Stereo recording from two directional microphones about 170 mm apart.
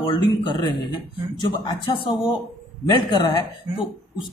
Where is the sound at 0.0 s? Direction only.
25° left (ahead or behind).